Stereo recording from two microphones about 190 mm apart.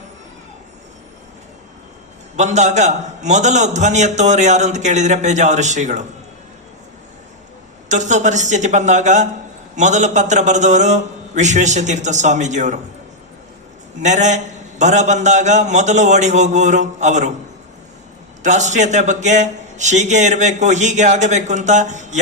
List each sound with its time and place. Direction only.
2.3 s a man's voice: 35° right (ahead or behind)
7.9 s a man's voice: 40° right (ahead or behind)
14.0 s a man's voice: 40° right (ahead or behind)
18.4 s a man's voice: 40° right (ahead or behind)